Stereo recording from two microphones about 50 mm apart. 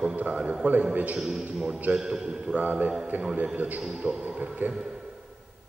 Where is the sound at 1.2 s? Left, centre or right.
Centre.